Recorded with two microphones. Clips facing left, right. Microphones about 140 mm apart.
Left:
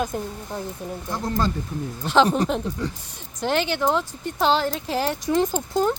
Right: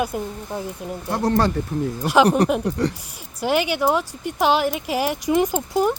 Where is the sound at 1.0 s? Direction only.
70° right (ahead or behind).